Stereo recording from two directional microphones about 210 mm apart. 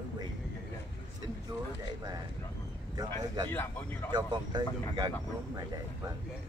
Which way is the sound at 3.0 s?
20° right (ahead or behind).